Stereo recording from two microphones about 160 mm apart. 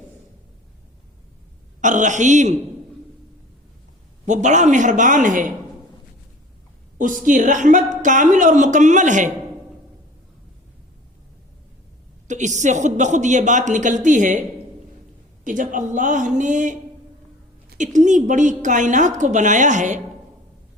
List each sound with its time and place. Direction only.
1.8 s a woman's voice: 50° right (ahead or behind)
4.3 s a woman's voice: 50° right (ahead or behind)
7.3 s a woman's voice: 50° right (ahead or behind)
12.3 s a woman's voice: 50° right (ahead or behind)
15.4 s a woman's voice: 55° right (ahead or behind)
17.7 s a woman's voice: 50° right (ahead or behind)